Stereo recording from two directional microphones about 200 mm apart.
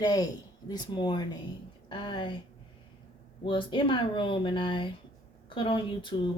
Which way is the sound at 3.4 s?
25° left (ahead or behind).